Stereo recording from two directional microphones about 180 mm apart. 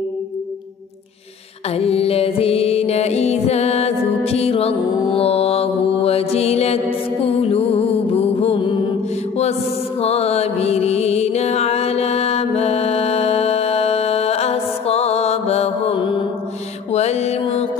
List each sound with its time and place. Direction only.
1.7 s music: 35° left (ahead or behind)